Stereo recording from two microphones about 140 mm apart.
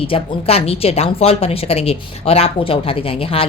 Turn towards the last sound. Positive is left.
turn(degrees=40)  # may be behind; listen again after turning